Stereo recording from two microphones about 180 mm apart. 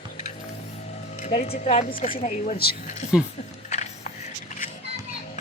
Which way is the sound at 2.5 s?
60° left (ahead or behind).